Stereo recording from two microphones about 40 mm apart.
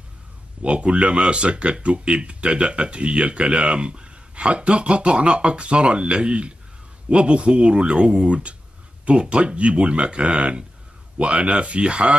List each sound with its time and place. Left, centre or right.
0.6 s speech: right